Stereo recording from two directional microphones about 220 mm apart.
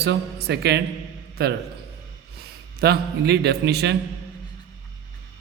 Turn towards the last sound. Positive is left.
turn(degrees=-50)  # may be behind; listen again after turning